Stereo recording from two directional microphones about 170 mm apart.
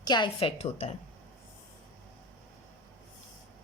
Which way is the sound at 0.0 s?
25° left (ahead or behind).